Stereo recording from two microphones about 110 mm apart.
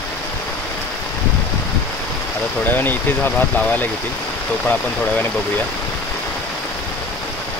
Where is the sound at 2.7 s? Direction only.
20° left (ahead or behind).